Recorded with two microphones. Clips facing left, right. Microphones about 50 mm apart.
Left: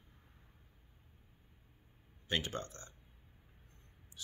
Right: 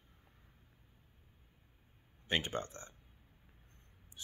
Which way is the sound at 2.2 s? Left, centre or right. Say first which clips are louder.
Right 2 dB; right.